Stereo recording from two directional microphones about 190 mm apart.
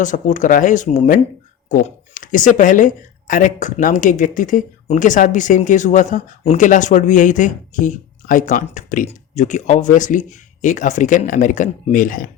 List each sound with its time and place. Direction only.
0.0 s speech: 40° left (ahead or behind)